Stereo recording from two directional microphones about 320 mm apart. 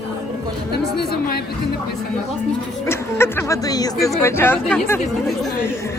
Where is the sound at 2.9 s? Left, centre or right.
Centre.